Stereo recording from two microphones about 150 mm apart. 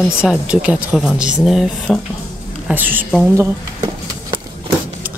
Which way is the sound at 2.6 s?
10° right (ahead or behind).